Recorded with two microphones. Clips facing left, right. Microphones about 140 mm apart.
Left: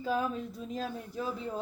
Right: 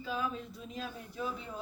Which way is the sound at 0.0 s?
45° left (ahead or behind).